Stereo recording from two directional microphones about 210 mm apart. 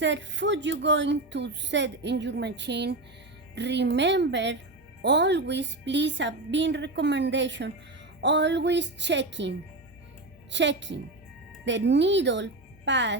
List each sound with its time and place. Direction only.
0.0 s a woman's voice: 60° right (ahead or behind)